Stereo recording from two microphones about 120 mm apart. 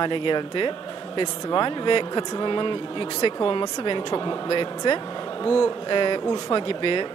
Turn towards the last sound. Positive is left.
turn(degrees=45)  # may be behind; listen again after turning